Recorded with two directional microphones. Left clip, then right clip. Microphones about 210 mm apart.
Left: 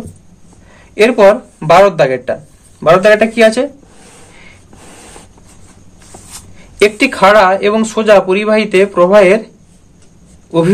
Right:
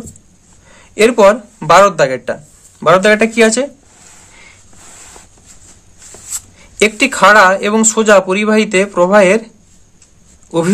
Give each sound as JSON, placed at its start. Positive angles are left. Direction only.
{"t": 0.9, "sound": "speech", "side_deg": -35}
{"t": 6.8, "sound": "speech", "side_deg": -25}